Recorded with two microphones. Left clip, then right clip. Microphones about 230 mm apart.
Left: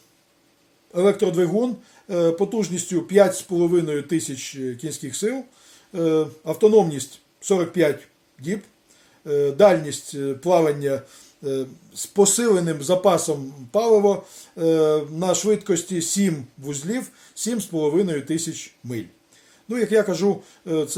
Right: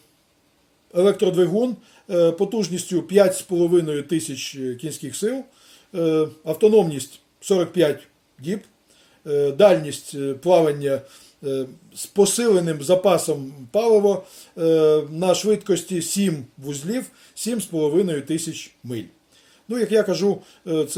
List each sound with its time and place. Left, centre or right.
0.9 s speech: centre
9.2 s speech: centre
12.1 s speech: centre